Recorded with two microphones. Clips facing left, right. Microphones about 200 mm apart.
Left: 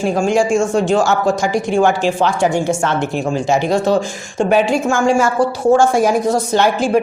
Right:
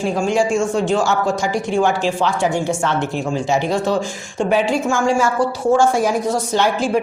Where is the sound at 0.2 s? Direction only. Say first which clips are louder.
Left 3 dB; 45° left (ahead or behind).